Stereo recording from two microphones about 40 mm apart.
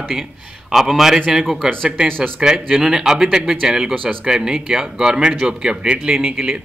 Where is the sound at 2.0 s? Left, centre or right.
Right.